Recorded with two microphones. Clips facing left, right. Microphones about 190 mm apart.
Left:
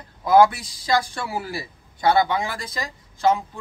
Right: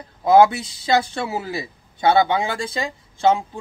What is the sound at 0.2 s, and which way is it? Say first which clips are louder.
A man's voice: right 2 dB; 25° right (ahead or behind).